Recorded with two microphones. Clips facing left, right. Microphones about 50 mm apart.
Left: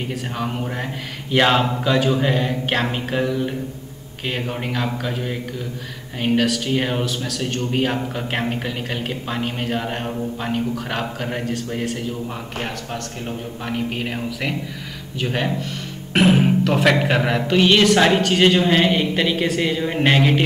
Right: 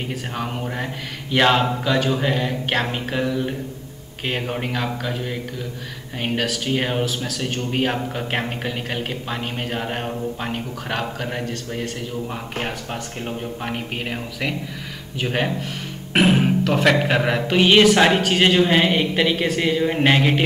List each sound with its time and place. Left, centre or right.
0.1 s speech: centre
14.0 s speech: centre
17.6 s speech: centre